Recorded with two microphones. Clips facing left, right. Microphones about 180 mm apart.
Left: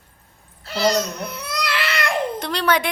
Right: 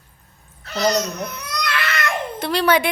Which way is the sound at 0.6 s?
30° left (ahead or behind).